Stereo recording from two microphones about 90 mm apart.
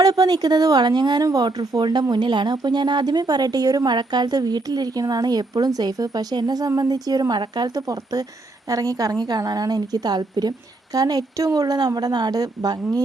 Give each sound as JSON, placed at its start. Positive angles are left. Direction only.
{"t": 0.0, "sound": "a woman's voice", "side_deg": -40}